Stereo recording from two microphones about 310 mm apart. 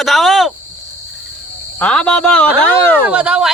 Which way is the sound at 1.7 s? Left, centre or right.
Centre.